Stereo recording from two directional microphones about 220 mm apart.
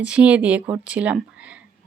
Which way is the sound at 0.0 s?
5° right (ahead or behind).